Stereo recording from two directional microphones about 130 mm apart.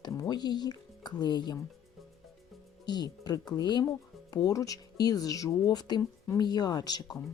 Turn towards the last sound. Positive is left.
turn(degrees=30)  # may be behind; listen again after turning